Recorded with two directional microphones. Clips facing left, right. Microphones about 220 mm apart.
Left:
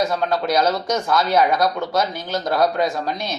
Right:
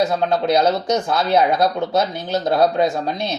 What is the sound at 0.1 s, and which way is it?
Speech, 25° right (ahead or behind).